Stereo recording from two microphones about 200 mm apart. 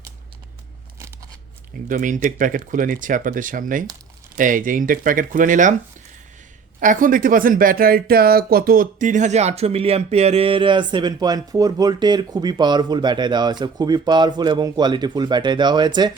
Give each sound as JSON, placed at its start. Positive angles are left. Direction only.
{"t": 1.9, "sound": "speech", "side_deg": -40}
{"t": 6.7, "sound": "speech", "side_deg": -40}